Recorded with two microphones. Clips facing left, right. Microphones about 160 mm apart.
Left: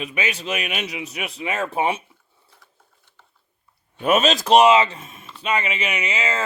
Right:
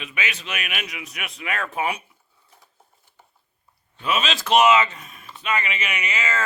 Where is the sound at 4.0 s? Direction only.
45° left (ahead or behind); by 6.4 s 30° left (ahead or behind).